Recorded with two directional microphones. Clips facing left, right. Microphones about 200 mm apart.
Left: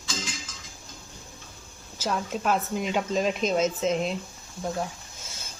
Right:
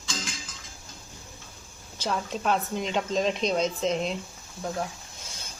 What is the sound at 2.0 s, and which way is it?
Speech, 5° left (ahead or behind).